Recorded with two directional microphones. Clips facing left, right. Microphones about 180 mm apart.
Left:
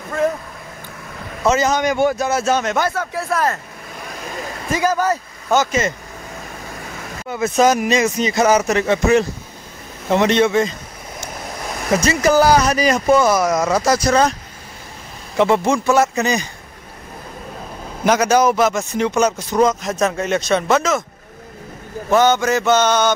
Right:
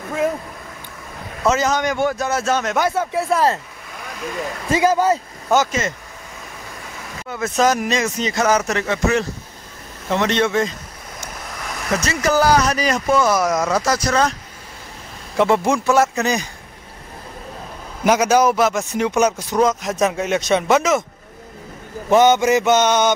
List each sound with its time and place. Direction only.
1.4 s a man's voice: centre (ahead or behind)
2.9 s mantra: 25° right (ahead or behind)
4.6 s mantra: 25° right (ahead or behind)
7.2 s speech: 10° left (ahead or behind)
11.9 s speech: 15° left (ahead or behind)
13.4 s a man's voice: centre (ahead or behind)
13.7 s speech: 15° left (ahead or behind)
15.3 s a man's voice: centre (ahead or behind)
18.0 s speech: 5° right (ahead or behind)
22.1 s mantra: 20° right (ahead or behind)